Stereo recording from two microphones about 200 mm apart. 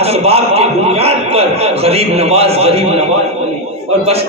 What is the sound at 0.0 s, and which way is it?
A man's voice, 30° right (ahead or behind).